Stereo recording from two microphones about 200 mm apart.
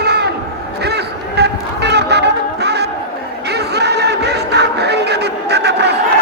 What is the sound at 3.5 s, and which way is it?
Music, 55° right (ahead or behind).